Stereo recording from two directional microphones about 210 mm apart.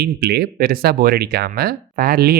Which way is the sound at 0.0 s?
50° right (ahead or behind).